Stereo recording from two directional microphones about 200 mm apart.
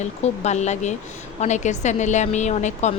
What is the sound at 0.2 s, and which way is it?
A woman's voice, 35° left (ahead or behind).